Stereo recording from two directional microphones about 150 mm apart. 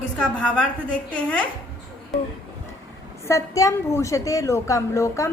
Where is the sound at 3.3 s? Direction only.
20° left (ahead or behind).